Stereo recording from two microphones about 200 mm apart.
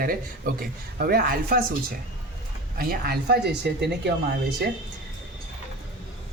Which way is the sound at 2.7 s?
50° right (ahead or behind).